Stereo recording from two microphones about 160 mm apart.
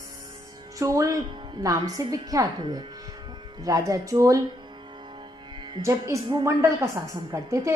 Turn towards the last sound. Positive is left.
turn(degrees=-20)  # may be behind; listen again after turning